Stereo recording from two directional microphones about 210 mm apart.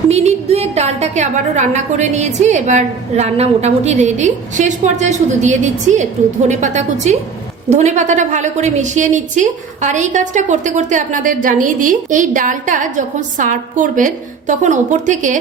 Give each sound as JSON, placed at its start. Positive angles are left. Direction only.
{"t": 0.1, "sound": "a woman's voice", "side_deg": -30}